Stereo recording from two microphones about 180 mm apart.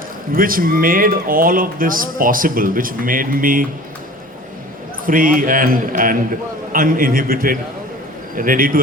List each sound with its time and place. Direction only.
0.3 s speech: 50° right (ahead or behind)
5.0 s speech: 50° right (ahead or behind)